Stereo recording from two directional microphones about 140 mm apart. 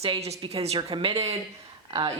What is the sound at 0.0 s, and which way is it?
Speech, 45° right (ahead or behind).